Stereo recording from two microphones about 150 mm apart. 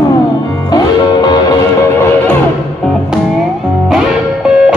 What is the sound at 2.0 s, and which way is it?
Music, 15° left (ahead or behind).